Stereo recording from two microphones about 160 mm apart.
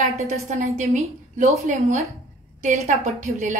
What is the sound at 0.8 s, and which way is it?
A woman's voice, 40° right (ahead or behind).